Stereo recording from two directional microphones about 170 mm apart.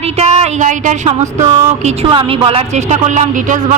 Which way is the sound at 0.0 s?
40° right (ahead or behind).